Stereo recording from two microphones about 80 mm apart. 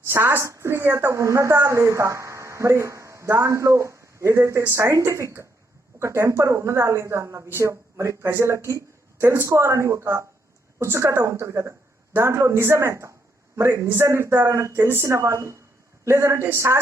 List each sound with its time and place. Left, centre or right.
0.1 s a woman's voice: right